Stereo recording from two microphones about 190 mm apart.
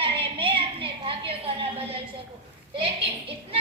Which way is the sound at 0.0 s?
25° right (ahead or behind).